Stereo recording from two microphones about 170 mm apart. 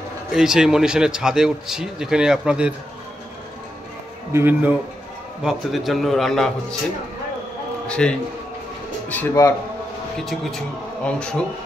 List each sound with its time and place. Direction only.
0.3 s a man's voice: 5° right (ahead or behind)
4.3 s a man's voice: 15° right (ahead or behind)
7.8 s a man's voice: 5° left (ahead or behind)
10.2 s a man's voice: centre (ahead or behind)